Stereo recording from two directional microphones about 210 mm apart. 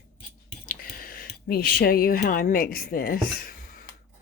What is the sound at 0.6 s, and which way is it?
Speech, 40° left (ahead or behind).